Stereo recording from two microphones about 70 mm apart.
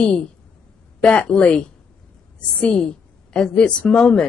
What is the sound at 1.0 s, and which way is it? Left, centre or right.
Speech, centre.